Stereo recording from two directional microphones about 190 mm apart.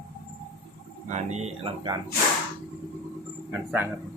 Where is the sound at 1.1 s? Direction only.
35° right (ahead or behind).